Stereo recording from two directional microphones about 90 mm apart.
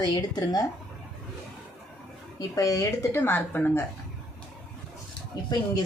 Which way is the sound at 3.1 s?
25° left (ahead or behind).